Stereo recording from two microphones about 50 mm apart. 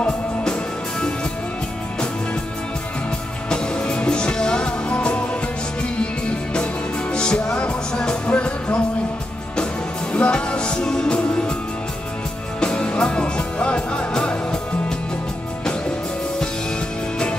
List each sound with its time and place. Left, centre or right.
3.4 s music: centre
10.1 s music: left
12.5 s music: centre